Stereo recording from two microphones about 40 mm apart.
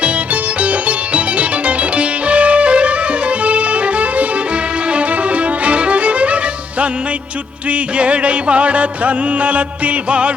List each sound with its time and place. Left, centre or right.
0.6 s music: right